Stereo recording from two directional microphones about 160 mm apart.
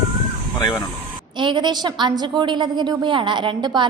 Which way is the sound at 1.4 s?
30° right (ahead or behind).